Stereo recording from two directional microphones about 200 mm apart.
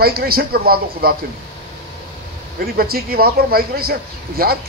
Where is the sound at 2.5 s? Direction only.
50° right (ahead or behind).